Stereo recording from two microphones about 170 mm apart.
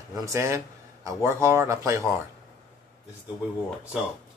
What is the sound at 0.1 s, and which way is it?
Speech, 20° right (ahead or behind).